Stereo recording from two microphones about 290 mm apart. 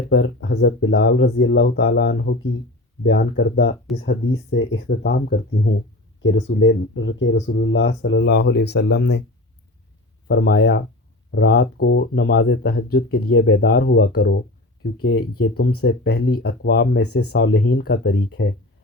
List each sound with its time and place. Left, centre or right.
0.1 s speech: left
10.2 s speech: left